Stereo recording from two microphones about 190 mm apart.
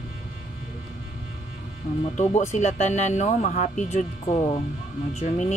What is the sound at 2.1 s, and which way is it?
Speech, 35° left (ahead or behind).